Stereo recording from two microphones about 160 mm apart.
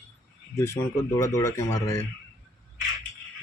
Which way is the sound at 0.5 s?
15° left (ahead or behind).